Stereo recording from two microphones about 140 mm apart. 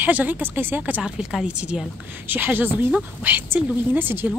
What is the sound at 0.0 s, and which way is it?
Speech, 10° right (ahead or behind).